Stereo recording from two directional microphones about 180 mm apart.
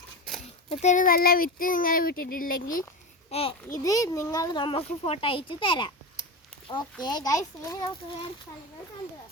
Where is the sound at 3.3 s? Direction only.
30° left (ahead or behind).